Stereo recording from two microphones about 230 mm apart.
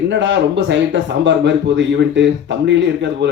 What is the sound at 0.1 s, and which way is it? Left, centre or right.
Speech, right.